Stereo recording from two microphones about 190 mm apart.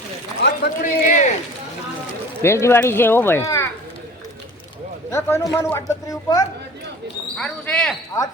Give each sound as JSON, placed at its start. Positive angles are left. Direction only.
{"t": 0.4, "sound": "a sound", "side_deg": 50}
{"t": 2.4, "sound": "speech", "side_deg": 15}
{"t": 5.1, "sound": "speech", "side_deg": 15}
{"t": 7.3, "sound": "speech", "side_deg": 5}